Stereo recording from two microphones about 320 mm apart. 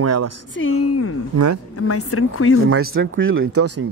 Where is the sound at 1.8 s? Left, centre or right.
Left.